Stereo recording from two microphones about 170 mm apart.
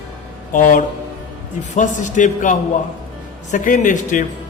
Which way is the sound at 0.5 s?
50° left (ahead or behind).